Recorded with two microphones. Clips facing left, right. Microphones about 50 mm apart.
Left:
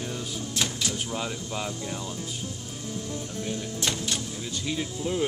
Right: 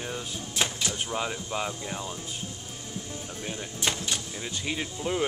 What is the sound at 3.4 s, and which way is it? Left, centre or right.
Speech, centre.